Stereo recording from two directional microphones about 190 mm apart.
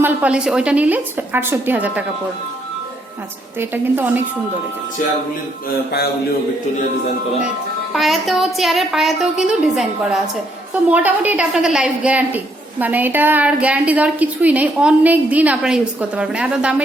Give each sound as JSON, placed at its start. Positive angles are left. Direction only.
{"t": 0.0, "sound": "a woman's voice", "side_deg": -5}
{"t": 3.6, "sound": "a woman's voice", "side_deg": -10}
{"t": 7.9, "sound": "a woman's voice", "side_deg": 0}